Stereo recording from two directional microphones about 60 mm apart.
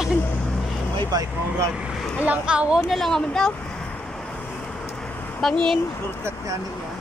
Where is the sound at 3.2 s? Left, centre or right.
Centre.